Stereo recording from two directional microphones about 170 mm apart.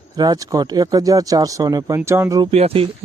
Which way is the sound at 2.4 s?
35° right (ahead or behind).